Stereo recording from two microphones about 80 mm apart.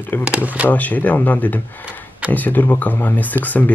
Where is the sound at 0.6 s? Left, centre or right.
Centre.